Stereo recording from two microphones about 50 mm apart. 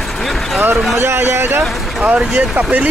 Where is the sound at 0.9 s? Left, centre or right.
Right.